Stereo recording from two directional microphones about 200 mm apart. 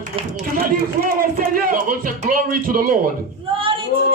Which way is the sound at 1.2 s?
45° right (ahead or behind).